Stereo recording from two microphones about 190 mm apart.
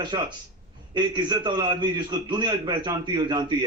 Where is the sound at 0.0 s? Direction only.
25° right (ahead or behind).